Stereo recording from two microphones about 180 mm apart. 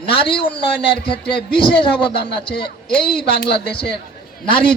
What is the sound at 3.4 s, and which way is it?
Speech, 60° left (ahead or behind).